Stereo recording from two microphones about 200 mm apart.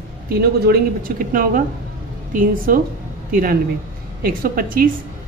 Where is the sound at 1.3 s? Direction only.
45° right (ahead or behind).